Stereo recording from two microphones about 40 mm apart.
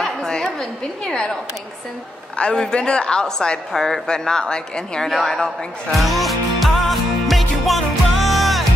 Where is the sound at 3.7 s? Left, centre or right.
Centre.